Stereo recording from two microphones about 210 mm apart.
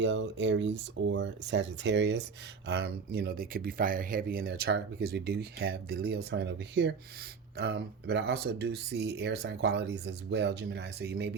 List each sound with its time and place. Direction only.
0.0 s speech: 60° right (ahead or behind)